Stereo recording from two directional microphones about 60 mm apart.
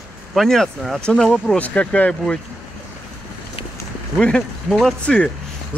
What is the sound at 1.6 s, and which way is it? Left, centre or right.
Speech, left.